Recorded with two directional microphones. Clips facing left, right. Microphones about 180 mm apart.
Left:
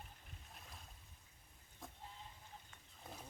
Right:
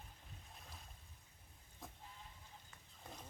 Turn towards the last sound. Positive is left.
turn(degrees=5)  # may be behind; listen again after turning